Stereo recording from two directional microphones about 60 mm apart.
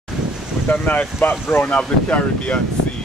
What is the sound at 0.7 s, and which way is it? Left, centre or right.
Speech, left.